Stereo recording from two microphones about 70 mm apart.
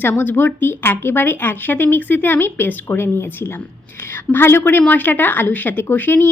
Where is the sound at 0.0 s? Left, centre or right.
Left.